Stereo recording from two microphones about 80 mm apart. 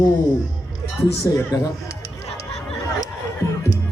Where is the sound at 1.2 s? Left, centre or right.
Left.